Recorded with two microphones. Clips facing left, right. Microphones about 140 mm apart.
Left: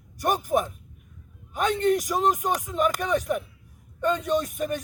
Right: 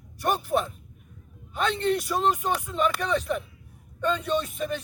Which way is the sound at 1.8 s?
45° left (ahead or behind).